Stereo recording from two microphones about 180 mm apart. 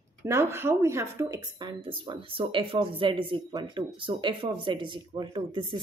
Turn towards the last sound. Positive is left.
turn(degrees=-25)  # may be behind; listen again after turning